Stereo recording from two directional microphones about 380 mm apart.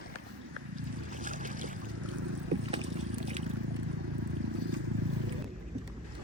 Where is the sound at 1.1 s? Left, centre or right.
Centre.